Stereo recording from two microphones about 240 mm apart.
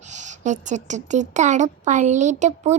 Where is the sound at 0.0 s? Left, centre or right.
Right.